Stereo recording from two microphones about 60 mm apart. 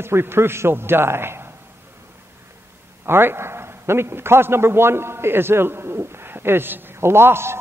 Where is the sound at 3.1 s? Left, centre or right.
Right.